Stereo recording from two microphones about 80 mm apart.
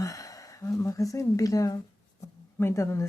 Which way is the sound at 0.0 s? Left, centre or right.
Left.